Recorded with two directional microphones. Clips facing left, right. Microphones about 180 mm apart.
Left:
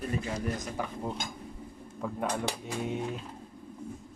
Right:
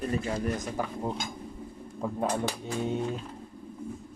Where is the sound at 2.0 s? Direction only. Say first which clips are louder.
Right 3 dB; 30° right (ahead or behind).